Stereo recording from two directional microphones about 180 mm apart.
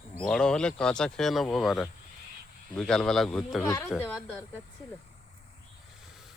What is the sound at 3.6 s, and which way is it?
Speech, 15° left (ahead or behind).